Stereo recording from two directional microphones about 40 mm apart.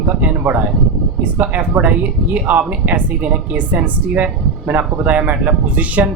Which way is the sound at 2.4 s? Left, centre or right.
Right.